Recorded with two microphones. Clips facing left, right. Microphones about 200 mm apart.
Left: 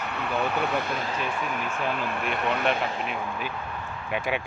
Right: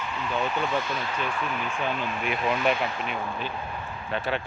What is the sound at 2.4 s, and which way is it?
Speech, 65° left (ahead or behind).